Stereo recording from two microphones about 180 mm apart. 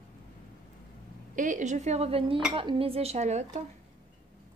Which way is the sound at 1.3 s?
45° right (ahead or behind).